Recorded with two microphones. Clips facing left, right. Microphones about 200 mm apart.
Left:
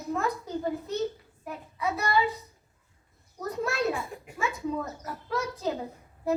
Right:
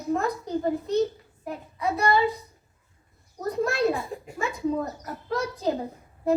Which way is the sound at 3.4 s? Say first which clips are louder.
Right 5 dB; 35° right (ahead or behind).